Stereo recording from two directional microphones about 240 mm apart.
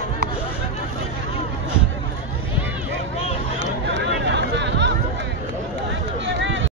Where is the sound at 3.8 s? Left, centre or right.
Right.